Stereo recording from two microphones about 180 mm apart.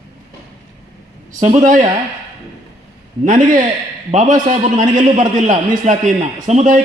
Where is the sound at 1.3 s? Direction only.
40° right (ahead or behind).